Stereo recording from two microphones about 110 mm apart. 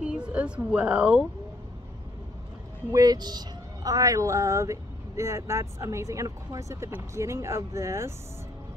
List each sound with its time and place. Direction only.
0.0 s speech: 10° right (ahead or behind)
2.9 s speech: 35° right (ahead or behind)